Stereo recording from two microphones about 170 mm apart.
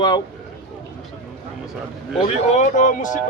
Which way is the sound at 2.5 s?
50° left (ahead or behind).